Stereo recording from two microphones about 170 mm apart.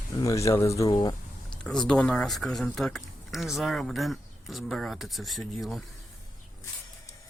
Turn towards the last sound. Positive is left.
turn(degrees=0)  # may be behind; listen again after turning